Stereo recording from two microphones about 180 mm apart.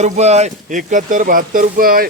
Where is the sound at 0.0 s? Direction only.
40° right (ahead or behind).